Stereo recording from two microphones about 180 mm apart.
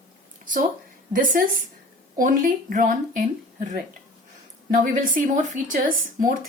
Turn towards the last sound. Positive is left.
turn(degrees=-45)  # may be behind; listen again after turning